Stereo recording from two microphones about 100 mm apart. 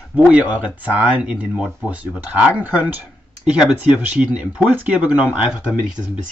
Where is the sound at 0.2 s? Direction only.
15° right (ahead or behind).